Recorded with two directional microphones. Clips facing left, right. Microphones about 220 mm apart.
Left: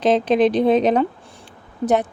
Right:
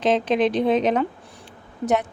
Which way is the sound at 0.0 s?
35° left (ahead or behind).